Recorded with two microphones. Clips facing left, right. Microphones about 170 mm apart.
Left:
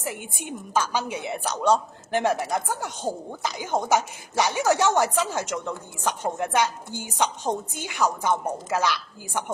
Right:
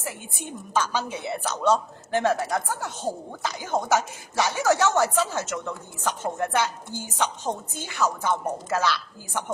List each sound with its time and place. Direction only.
0.0 s a woman's voice: 15° left (ahead or behind)